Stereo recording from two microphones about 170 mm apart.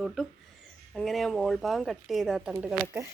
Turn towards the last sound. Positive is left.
turn(degrees=-15)  # may be behind; listen again after turning